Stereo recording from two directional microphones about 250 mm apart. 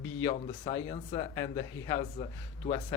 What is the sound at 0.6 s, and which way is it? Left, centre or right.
Speech, left.